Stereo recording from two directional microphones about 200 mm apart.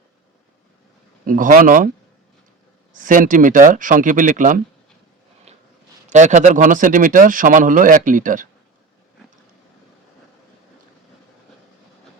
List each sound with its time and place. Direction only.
1.3 s speech: 45° right (ahead or behind)
2.9 s a man's voice: 40° right (ahead or behind)
6.1 s a man's voice: 35° right (ahead or behind)